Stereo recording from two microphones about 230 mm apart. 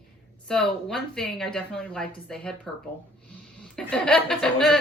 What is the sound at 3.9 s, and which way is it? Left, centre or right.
Speech, centre.